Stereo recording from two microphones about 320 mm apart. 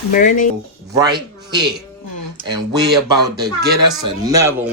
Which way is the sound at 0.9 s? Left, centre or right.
Centre.